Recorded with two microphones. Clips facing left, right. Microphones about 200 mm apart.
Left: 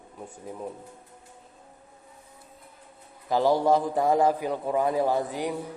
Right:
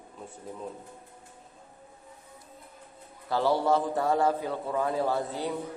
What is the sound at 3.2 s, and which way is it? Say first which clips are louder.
A man's voice: left 3 dB; 15° left (ahead or behind).